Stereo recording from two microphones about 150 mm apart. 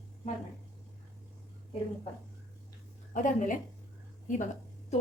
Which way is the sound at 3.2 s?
60° left (ahead or behind).